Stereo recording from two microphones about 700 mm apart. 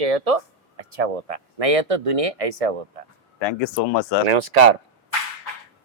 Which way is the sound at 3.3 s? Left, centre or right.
Left.